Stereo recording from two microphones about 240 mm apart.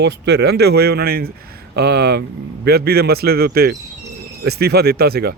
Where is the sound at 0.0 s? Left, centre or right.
Right.